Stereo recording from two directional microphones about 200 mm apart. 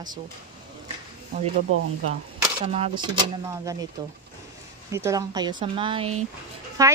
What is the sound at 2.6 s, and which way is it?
Speech, 30° right (ahead or behind).